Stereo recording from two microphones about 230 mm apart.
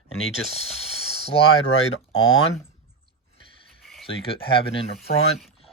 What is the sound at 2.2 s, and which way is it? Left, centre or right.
Speech, left.